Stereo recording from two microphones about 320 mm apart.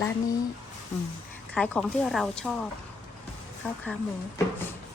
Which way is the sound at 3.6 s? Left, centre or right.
Centre.